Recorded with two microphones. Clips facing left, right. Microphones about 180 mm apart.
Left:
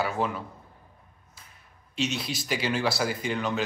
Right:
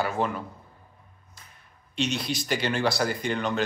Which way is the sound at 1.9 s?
5° left (ahead or behind).